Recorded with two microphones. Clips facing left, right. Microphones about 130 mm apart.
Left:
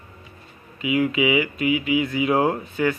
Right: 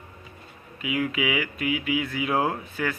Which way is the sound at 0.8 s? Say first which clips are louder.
Left 6 dB; 5° left (ahead or behind).